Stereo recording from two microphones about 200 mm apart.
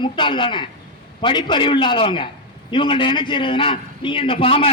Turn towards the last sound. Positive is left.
turn(degrees=25)  # may be behind; listen again after turning